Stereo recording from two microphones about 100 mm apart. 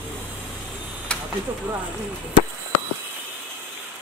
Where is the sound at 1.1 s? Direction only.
10° left (ahead or behind).